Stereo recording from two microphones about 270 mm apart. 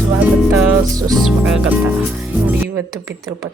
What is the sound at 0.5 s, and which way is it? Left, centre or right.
Speech, centre.